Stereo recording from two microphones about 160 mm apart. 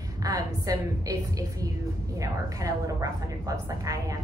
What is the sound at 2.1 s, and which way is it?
A woman's voice, 20° right (ahead or behind).